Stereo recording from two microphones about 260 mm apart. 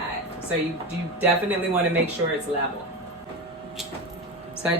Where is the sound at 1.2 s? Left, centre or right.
Centre.